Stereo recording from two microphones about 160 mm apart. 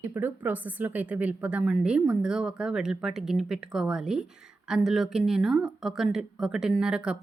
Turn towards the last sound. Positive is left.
turn(degrees=-5)  # may be behind; listen again after turning